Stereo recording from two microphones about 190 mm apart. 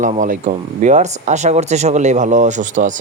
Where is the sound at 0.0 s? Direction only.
40° right (ahead or behind).